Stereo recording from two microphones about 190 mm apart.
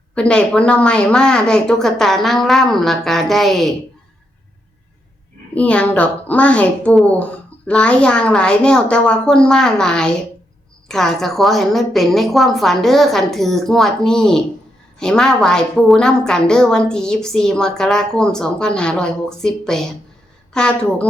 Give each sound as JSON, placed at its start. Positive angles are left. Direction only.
{"t": 0.1, "sound": "a woman's voice", "side_deg": 5}
{"t": 5.5, "sound": "a woman's voice", "side_deg": 5}